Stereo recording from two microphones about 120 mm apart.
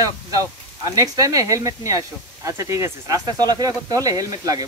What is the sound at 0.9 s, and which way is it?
Speech, 30° right (ahead or behind).